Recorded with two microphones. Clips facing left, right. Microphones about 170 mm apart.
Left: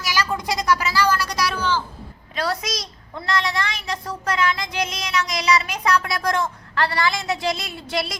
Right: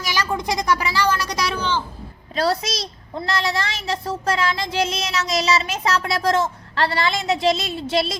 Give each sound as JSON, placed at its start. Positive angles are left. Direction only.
{"t": 0.1, "sound": "a sound", "side_deg": -20}
{"t": 0.4, "sound": "speech", "side_deg": -20}
{"t": 2.3, "sound": "a woman's voice", "side_deg": -30}